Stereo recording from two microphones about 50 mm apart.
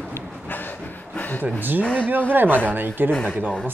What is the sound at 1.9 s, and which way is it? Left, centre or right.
Speech, right.